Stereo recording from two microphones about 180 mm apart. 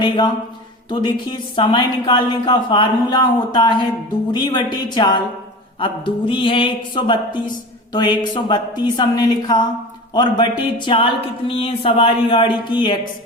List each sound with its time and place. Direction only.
0.9 s a woman's voice: 25° left (ahead or behind)